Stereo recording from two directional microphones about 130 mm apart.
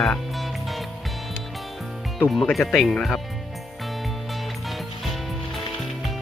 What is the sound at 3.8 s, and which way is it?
Music, centre (ahead or behind).